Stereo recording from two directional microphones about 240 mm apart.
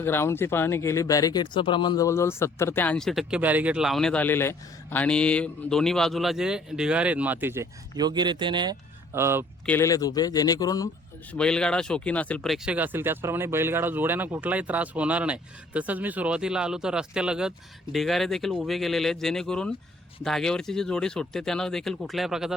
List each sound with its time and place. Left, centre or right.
0.0 s speech: centre
9.6 s speech: centre
11.3 s speech: centre